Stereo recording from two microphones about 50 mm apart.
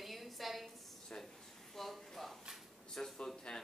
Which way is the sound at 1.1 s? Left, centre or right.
Left.